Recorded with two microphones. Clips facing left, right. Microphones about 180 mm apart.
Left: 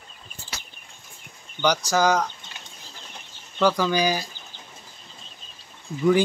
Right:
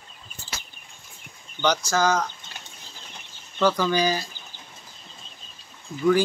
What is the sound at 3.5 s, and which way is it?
Speech, 10° left (ahead or behind).